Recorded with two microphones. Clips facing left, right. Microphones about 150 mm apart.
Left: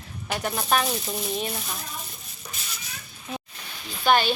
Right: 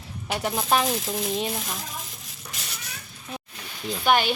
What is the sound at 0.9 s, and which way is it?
Speech, 90° right.